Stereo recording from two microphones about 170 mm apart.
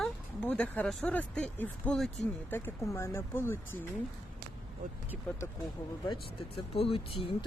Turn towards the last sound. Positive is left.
turn(degrees=35)  # may be behind; listen again after turning